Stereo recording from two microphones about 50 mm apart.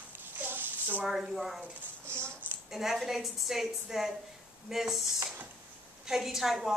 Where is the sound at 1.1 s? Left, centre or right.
Centre.